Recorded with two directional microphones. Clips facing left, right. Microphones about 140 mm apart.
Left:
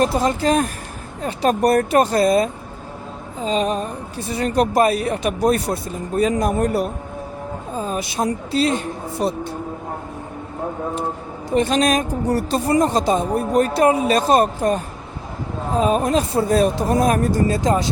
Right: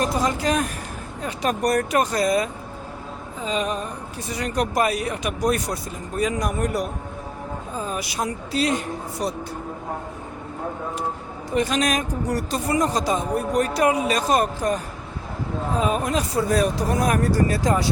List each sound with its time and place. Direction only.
0.0 s a woman's voice: 30° left (ahead or behind)
11.5 s a woman's voice: 30° left (ahead or behind)
15.8 s a woman's voice: 35° left (ahead or behind)